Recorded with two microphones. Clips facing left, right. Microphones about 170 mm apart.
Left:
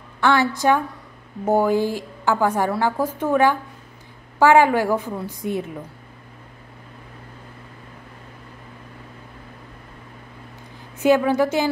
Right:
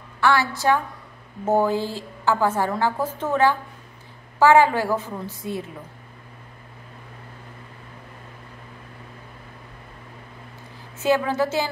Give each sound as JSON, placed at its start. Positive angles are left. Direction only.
{"t": 0.2, "sound": "a woman's voice", "side_deg": 20}
{"t": 11.0, "sound": "a woman's voice", "side_deg": 15}